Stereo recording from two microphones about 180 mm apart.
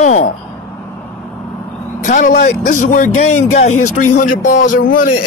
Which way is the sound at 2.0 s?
45° left (ahead or behind).